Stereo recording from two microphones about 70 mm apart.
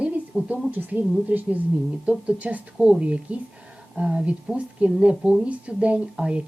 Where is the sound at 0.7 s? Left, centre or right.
Right.